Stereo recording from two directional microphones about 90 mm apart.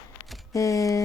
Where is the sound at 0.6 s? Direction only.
35° left (ahead or behind).